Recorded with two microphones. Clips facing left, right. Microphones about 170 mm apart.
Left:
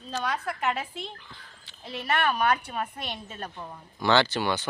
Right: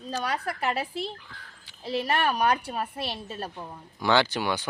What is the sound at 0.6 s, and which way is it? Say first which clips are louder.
A woman's voice: right 1 dB; 35° right (ahead or behind).